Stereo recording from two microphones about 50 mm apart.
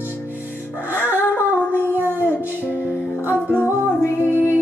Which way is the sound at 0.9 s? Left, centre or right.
Left.